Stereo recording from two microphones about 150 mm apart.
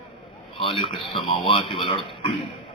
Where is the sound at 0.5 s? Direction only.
35° left (ahead or behind).